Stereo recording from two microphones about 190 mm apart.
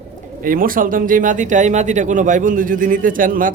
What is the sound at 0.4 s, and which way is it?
Speech, 45° right (ahead or behind).